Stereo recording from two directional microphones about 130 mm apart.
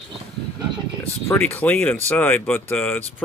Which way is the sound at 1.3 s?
10° left (ahead or behind).